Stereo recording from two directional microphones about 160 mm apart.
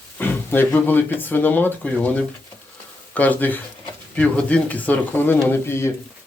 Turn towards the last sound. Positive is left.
turn(degrees=15)  # may be behind; listen again after turning